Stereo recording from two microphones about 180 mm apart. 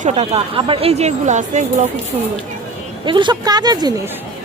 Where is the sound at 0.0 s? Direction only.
35° right (ahead or behind).